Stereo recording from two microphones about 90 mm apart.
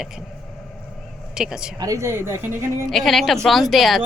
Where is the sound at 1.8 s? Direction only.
35° right (ahead or behind).